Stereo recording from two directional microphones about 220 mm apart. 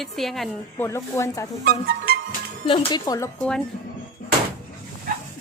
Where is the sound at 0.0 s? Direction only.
Centre (ahead or behind).